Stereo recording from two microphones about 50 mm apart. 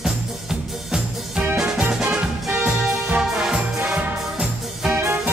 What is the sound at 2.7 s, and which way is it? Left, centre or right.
Music, centre.